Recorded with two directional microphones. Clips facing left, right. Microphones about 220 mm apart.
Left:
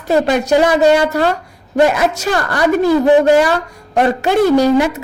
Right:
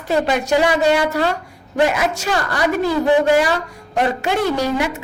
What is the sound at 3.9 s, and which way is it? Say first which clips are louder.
Speech: left 5 dB; 40° left (ahead or behind).